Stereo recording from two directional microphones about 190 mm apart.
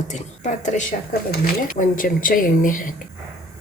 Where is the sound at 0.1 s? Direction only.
40° left (ahead or behind).